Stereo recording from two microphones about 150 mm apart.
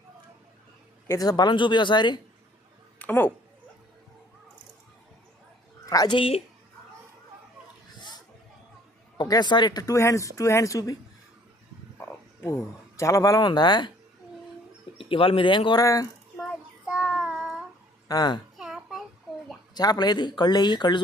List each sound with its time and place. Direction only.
1.0 s speech: 25° left (ahead or behind)
3.0 s speech: 10° left (ahead or behind)
5.8 s a woman's voice: 25° left (ahead or behind)
9.1 s speech: 25° left (ahead or behind)
11.9 s speech: 15° left (ahead or behind)
14.9 s speech: 35° left (ahead or behind)
15.8 s speech: 20° left (ahead or behind)
16.8 s child singing: 5° right (ahead or behind)
18.1 s speech: 25° left (ahead or behind)
18.5 s babbling: 5° right (ahead or behind)
19.7 s speech: 25° left (ahead or behind)